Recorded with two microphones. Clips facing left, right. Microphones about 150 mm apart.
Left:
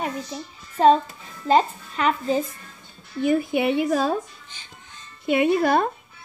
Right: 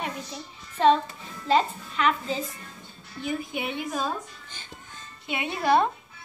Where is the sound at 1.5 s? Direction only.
40° left (ahead or behind).